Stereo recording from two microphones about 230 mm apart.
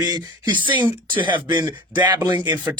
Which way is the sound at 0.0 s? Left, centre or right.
Centre.